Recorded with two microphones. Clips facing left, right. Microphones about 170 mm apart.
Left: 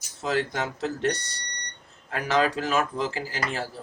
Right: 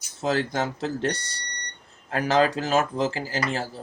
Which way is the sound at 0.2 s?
35° right (ahead or behind).